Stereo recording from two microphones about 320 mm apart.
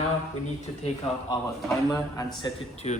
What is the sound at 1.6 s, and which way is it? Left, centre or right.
Speech, centre.